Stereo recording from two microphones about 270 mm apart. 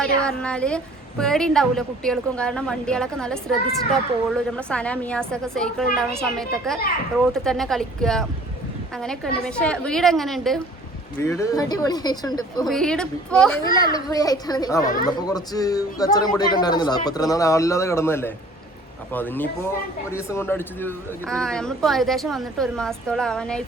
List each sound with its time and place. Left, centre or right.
0.0 s speech: centre
11.2 s a man's voice: centre
12.6 s a man's voice: centre
14.8 s speech: left
15.3 s a man's voice: centre